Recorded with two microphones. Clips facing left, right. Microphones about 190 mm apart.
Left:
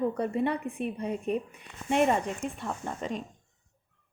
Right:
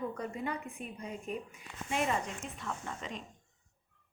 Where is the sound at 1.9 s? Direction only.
60° left (ahead or behind).